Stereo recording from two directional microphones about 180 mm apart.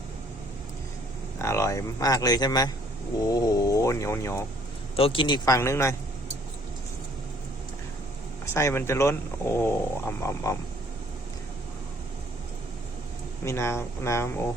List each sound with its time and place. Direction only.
1.4 s speech: 15° left (ahead or behind)
4.9 s speech: 30° left (ahead or behind); by 5.9 s 15° left (ahead or behind)
8.5 s speech: 15° left (ahead or behind)
13.4 s speech: 15° left (ahead or behind)